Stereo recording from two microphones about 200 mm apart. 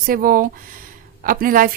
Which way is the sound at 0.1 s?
45° right (ahead or behind).